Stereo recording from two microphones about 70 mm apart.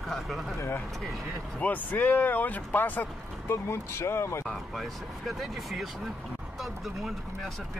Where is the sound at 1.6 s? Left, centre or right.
Left.